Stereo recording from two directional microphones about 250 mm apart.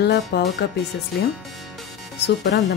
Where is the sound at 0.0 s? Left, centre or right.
Left.